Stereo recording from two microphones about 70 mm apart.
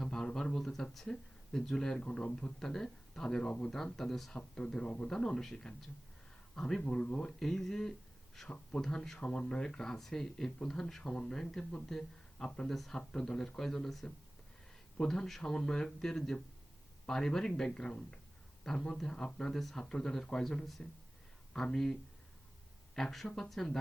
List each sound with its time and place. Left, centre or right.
0.0 s speech: centre
23.0 s speech: centre